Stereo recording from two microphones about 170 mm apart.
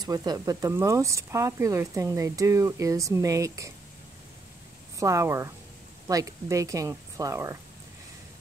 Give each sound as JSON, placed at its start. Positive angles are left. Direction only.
{"t": 0.0, "sound": "speech", "side_deg": -25}
{"t": 4.9, "sound": "speech", "side_deg": -20}